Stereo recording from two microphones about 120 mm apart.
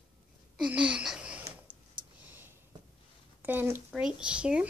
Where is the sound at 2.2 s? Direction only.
15° right (ahead or behind).